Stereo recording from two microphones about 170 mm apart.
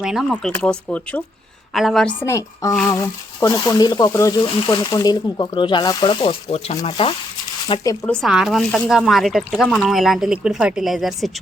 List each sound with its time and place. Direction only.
0.0 s speech: 5° right (ahead or behind)
2.2 s speech: 15° left (ahead or behind)
8.2 s speech: 5° right (ahead or behind)